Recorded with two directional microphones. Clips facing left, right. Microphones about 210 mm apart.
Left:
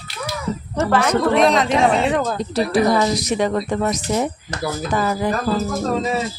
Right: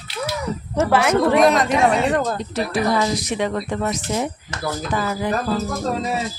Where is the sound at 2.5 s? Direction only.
35° left (ahead or behind).